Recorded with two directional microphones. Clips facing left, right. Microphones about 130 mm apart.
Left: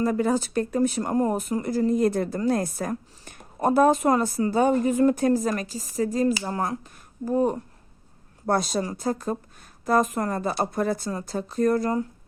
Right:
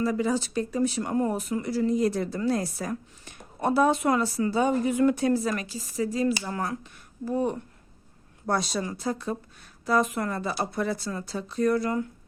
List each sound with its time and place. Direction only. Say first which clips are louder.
0.0 s a woman's voice: left 3 dB; 50° left (ahead or behind)